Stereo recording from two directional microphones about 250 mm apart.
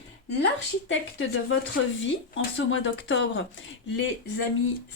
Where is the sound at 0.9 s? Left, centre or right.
Left.